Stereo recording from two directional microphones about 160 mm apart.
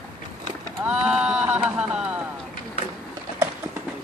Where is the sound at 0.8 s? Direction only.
5° right (ahead or behind).